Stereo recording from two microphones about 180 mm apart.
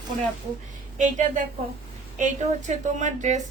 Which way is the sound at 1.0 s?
45° right (ahead or behind).